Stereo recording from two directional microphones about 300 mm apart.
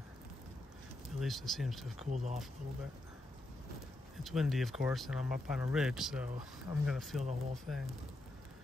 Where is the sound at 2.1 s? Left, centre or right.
Right.